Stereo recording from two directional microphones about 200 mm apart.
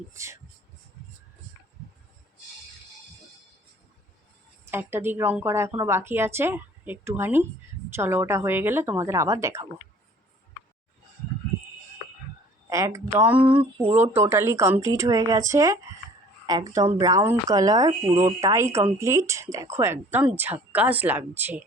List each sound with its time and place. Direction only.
0.1 s a woman's voice: 15° right (ahead or behind)
4.7 s a woman's voice: 10° right (ahead or behind)
12.6 s a woman's voice: 15° right (ahead or behind)
13.3 s a sound: 25° right (ahead or behind)
14.0 s a woman's voice: 10° right (ahead or behind)